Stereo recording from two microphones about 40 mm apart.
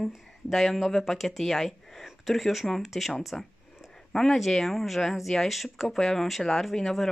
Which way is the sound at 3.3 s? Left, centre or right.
Centre.